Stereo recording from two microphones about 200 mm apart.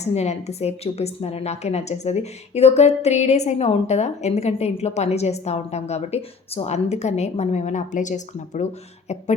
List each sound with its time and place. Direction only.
0.0 s a woman's voice: 35° left (ahead or behind)